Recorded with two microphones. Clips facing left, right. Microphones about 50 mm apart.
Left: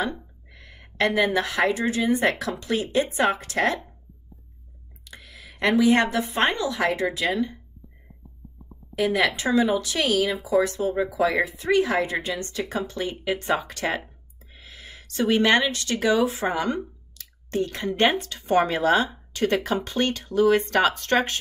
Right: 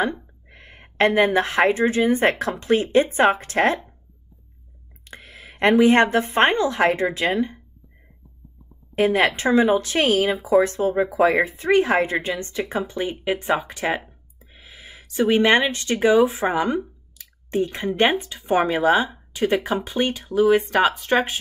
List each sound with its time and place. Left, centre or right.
0.0 s speech: right
5.0 s speech: right
8.9 s speech: right; by 21.4 s centre